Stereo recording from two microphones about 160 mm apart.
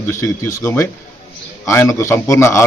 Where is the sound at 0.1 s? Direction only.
20° left (ahead or behind).